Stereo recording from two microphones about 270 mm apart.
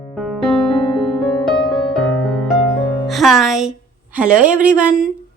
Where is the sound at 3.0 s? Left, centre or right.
Centre.